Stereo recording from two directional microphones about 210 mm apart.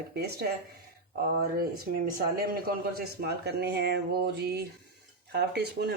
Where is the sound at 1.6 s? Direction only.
45° right (ahead or behind).